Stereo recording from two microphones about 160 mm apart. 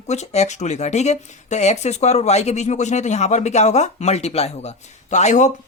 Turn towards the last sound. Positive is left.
turn(degrees=50)  # may be behind; listen again after turning